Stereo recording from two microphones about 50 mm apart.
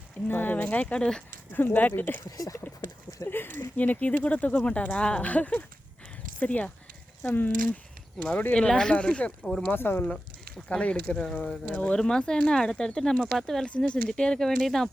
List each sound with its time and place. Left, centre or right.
0.3 s speech: left
1.5 s speech: left
3.2 s speech: left
3.8 s speech: left
8.5 s speech: centre
9.7 s speech: left
10.7 s speech: left
11.9 s speech: centre
13.0 s speech: centre
13.7 s speech: left